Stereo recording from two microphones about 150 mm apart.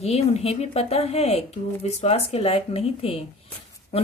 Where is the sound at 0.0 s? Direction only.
45° left (ahead or behind).